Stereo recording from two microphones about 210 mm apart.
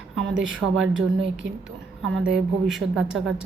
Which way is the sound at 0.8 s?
65° right (ahead or behind).